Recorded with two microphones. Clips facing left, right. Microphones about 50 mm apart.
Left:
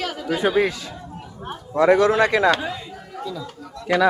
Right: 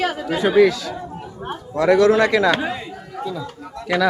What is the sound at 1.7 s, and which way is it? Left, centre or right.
Speech, left.